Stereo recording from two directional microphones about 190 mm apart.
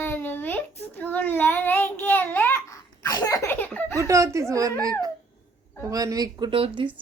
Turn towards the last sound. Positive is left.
turn(degrees=-25)  # may be behind; listen again after turning